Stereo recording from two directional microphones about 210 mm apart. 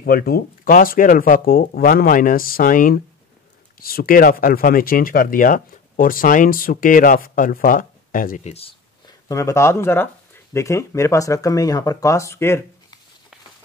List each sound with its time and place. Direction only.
0.0 s speech: 45° left (ahead or behind)
8.5 s speech: 15° left (ahead or behind)